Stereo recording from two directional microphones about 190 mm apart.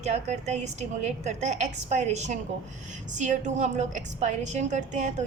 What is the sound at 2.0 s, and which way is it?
A woman's voice, 35° right (ahead or behind).